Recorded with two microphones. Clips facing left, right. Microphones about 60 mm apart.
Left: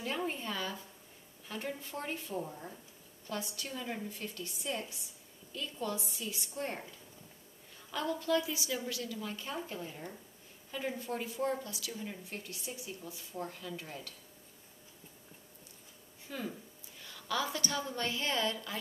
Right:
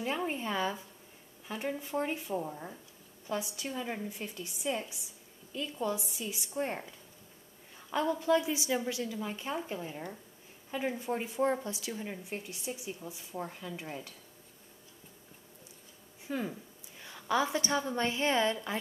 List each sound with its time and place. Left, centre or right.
0.0 s a woman's voice: centre
7.9 s a woman's voice: centre
16.3 s a woman's voice: centre